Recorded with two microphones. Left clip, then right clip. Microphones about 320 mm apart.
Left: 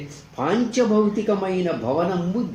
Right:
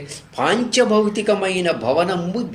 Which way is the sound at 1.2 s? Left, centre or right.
Right.